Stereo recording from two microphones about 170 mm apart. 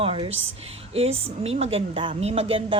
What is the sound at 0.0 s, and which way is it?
A woman's voice, 35° right (ahead or behind).